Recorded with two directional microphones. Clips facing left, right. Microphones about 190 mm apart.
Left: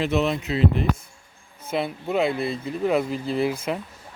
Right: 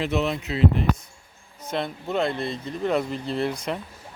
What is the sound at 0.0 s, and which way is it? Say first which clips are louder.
Speech: left 2 dB; 20° left (ahead or behind).